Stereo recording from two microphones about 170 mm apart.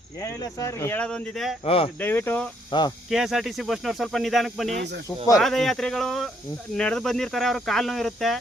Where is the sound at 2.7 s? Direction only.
30° left (ahead or behind).